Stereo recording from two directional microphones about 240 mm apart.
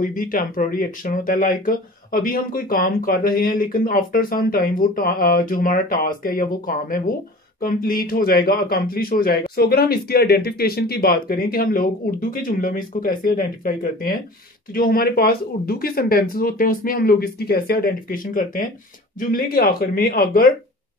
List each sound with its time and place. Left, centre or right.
0.0 s speech: left